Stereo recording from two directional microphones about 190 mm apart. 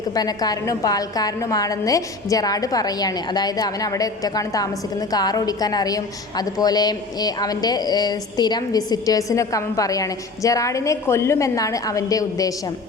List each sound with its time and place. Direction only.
0.1 s a woman's voice: 20° left (ahead or behind)